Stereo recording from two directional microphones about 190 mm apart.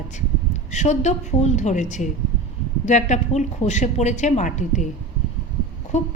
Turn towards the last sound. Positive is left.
turn(degrees=35)  # may be behind; listen again after turning